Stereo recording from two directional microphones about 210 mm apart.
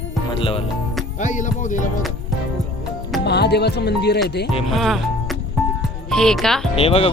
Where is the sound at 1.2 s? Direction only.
35° left (ahead or behind).